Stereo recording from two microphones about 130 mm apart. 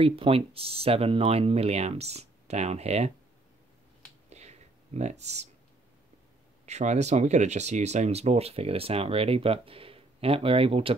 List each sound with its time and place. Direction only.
0.0 s speech: 45° right (ahead or behind)
4.3 s a sound: 55° right (ahead or behind)
6.6 s speech: 60° right (ahead or behind); by 11.0 s 45° right (ahead or behind)